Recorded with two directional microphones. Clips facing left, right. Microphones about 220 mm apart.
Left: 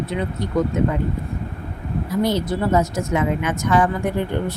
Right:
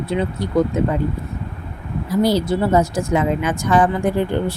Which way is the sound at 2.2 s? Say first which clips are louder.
Right 4 dB; 35° right (ahead or behind).